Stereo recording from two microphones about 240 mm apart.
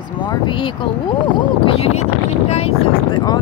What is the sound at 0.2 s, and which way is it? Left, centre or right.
Speech, centre.